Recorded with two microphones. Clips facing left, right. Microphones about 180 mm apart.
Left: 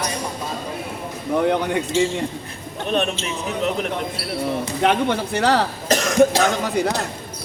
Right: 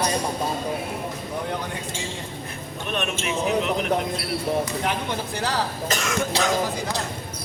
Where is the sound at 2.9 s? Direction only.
35° left (ahead or behind).